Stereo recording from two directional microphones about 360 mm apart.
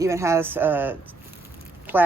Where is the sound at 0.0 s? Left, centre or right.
Centre.